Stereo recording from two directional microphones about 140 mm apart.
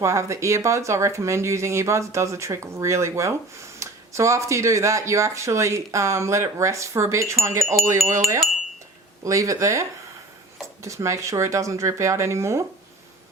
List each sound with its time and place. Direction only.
0.0 s speech: 20° right (ahead or behind)
9.2 s speech: 25° right (ahead or behind)
10.8 s speech: 20° right (ahead or behind)